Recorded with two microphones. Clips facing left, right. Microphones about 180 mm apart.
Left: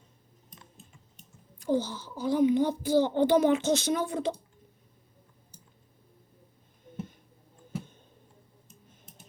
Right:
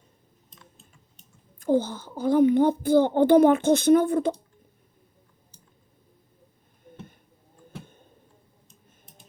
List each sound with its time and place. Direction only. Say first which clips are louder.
1.5 s a child's voice: right 5 dB; 50° right (ahead or behind)